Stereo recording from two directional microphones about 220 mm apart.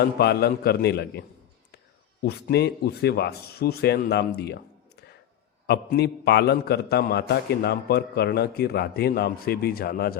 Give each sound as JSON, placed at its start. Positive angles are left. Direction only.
{"t": 0.0, "sound": "a man's voice", "side_deg": 45}
{"t": 2.2, "sound": "a man's voice", "side_deg": 45}